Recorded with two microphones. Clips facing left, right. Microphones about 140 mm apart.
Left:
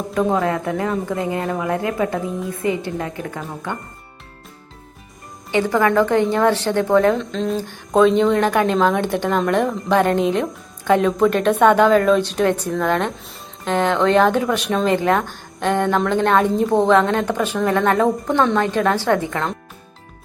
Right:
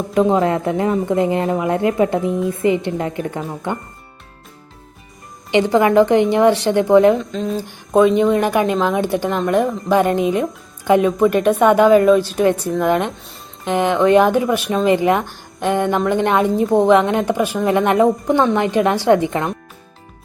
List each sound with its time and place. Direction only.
0.1 s a woman's voice: 20° right (ahead or behind)
5.5 s a woman's voice: 20° right (ahead or behind)
7.2 s a woman's voice: 5° right (ahead or behind)
14.8 s a woman's voice: 15° right (ahead or behind)